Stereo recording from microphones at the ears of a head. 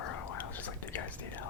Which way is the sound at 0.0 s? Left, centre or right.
Left.